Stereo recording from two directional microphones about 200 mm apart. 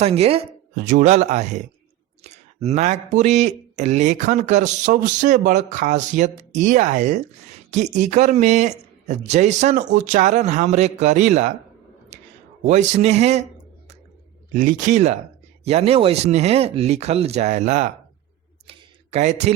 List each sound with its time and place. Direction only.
0.0 s speech: 30° right (ahead or behind)
12.6 s speech: 35° right (ahead or behind)
14.5 s speech: 40° right (ahead or behind)
18.7 s a sound: 35° right (ahead or behind)